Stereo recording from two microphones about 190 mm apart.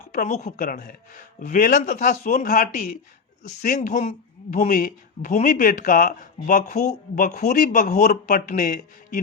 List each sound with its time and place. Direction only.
0.0 s a man's voice: 40° left (ahead or behind)